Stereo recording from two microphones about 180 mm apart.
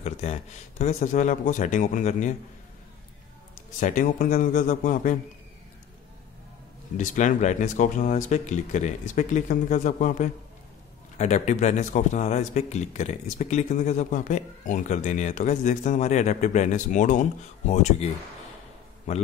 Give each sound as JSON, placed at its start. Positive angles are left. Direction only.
{"t": 0.0, "sound": "speech", "side_deg": 40}
{"t": 3.8, "sound": "speech", "side_deg": 45}
{"t": 7.0, "sound": "a man's voice", "side_deg": 45}